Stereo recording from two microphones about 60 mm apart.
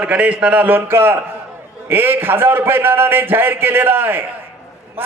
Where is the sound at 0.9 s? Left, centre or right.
Right.